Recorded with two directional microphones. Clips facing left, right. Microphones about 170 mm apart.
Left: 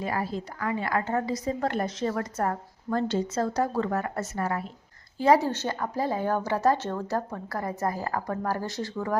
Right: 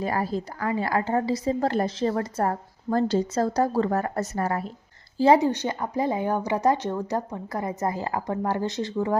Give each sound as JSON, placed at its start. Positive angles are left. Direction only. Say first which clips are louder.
{"t": 0.0, "sound": "a woman's voice", "louder": "right 3 dB", "side_deg": -40}
{"t": 5.1, "sound": "a woman's voice", "louder": "right 3 dB", "side_deg": -25}
{"t": 5.5, "sound": "a woman's voice", "louder": "right 3 dB", "side_deg": -15}